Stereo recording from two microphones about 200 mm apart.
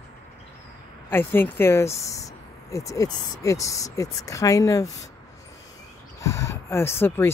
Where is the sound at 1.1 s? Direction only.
10° left (ahead or behind).